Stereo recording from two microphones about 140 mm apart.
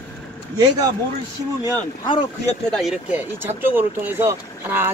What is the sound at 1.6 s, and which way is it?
Speech, 35° left (ahead or behind).